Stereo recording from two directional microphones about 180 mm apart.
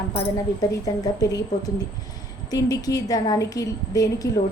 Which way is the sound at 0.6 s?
20° left (ahead or behind).